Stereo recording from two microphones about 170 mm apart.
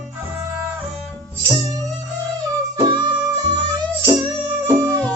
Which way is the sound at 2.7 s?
25° right (ahead or behind).